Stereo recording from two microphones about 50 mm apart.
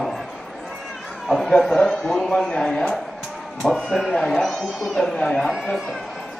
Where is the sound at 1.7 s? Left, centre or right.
Centre.